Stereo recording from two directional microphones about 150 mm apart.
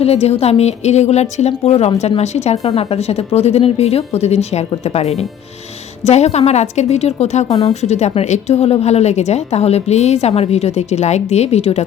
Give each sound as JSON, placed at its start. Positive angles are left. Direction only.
{"t": 0.0, "sound": "a woman's voice", "side_deg": 45}